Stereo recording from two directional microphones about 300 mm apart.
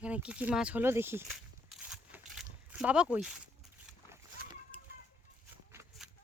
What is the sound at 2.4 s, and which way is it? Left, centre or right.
Speech, centre.